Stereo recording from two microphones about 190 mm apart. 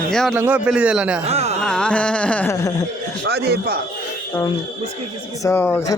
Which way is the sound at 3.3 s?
55° right (ahead or behind).